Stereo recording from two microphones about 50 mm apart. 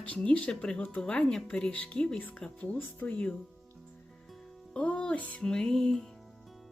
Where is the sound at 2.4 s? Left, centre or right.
Centre.